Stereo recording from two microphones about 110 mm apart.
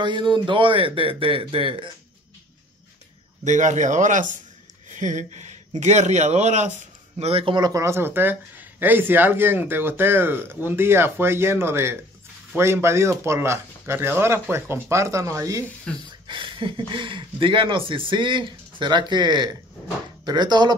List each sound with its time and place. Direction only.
0.0 s speech: 45° right (ahead or behind)
3.4 s speech: 90° right
5.1 s speech: 90° right
7.2 s speech: 65° right (ahead or behind)
7.5 s speech: 40° right (ahead or behind)
7.8 s speech: 20° right (ahead or behind)
15.9 s speech: 10° left (ahead or behind)
16.3 s speech: 50° right (ahead or behind)